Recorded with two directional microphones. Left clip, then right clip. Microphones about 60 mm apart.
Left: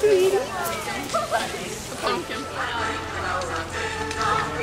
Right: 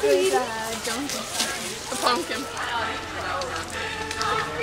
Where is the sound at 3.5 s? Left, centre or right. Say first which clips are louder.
Left 2 dB; centre.